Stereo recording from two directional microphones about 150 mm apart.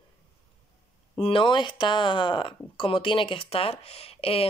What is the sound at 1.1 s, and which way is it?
Speech, 35° left (ahead or behind).